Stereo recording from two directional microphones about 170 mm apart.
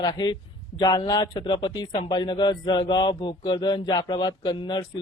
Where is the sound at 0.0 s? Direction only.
25° left (ahead or behind).